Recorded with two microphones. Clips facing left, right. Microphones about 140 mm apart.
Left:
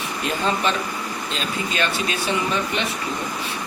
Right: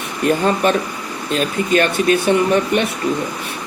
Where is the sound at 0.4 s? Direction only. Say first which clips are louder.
Right 6 dB; 50° right (ahead or behind).